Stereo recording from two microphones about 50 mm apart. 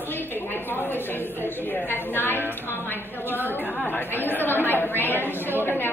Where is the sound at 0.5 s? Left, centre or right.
Left.